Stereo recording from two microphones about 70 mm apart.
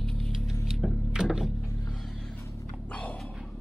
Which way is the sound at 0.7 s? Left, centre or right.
Centre.